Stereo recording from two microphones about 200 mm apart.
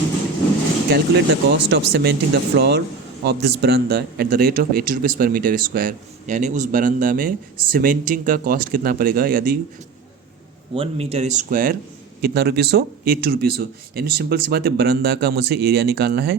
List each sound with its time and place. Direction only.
0.9 s speech: 55° right (ahead or behind)
10.8 s speech: 30° right (ahead or behind); by 16.4 s 55° right (ahead or behind)